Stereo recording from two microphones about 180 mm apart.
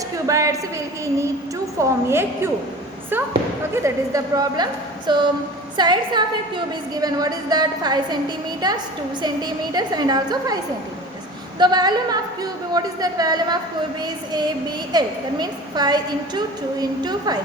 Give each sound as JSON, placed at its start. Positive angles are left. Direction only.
{"t": 0.3, "sound": "a woman's voice", "side_deg": -15}
{"t": 1.8, "sound": "a woman's voice", "side_deg": -15}
{"t": 3.8, "sound": "a woman's voice", "side_deg": -20}
{"t": 11.6, "sound": "a woman's voice", "side_deg": -25}
{"t": 14.9, "sound": "a woman's voice", "side_deg": -20}